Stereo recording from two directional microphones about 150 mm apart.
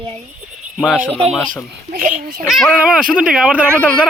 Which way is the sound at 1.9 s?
55° right (ahead or behind).